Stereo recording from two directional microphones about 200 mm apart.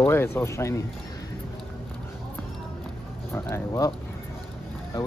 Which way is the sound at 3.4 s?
15° left (ahead or behind).